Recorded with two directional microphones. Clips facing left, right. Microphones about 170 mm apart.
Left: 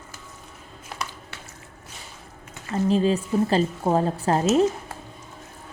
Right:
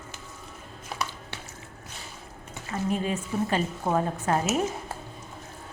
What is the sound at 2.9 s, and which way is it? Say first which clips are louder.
A woman's voice: left 8 dB; 30° left (ahead or behind).